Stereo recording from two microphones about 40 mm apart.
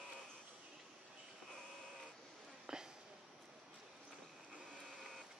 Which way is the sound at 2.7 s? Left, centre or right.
Centre.